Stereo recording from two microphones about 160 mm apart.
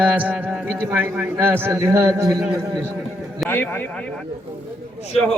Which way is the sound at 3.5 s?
15° left (ahead or behind).